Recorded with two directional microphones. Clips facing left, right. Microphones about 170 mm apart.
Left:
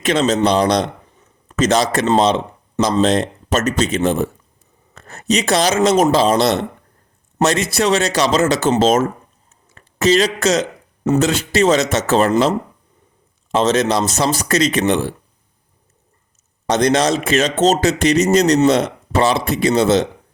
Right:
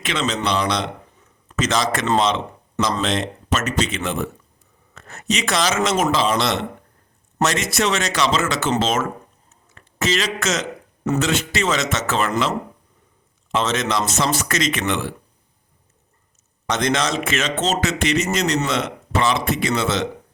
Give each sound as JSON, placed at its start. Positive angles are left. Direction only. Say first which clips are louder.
{"t": 0.0, "sound": "a man's voice", "louder": "left 8 dB", "side_deg": 40}
{"t": 9.7, "sound": "a sound", "louder": "left 8 dB", "side_deg": 35}
{"t": 11.2, "sound": "a man's voice", "louder": "left 7 dB", "side_deg": 35}
{"t": 16.6, "sound": "a man's voice", "louder": "left 6 dB", "side_deg": 35}